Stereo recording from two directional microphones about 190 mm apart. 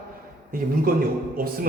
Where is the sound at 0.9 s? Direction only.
50° right (ahead or behind).